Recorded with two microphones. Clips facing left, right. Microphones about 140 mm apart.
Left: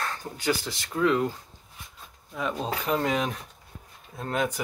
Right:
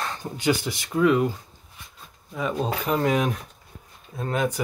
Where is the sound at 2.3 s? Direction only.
5° right (ahead or behind).